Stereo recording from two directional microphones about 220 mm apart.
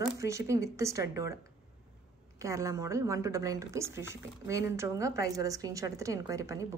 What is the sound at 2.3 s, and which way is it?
A woman's voice, 15° right (ahead or behind).